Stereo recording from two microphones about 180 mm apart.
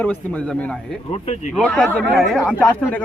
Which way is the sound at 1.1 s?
35° left (ahead or behind).